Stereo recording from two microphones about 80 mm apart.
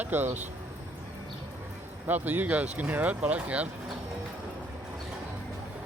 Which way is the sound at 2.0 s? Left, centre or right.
Right.